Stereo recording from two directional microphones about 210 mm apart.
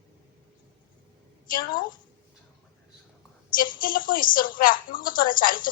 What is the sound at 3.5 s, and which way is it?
A woman's voice, 40° left (ahead or behind).